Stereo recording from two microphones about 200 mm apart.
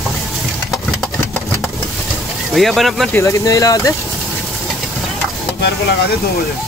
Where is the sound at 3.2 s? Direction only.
15° left (ahead or behind).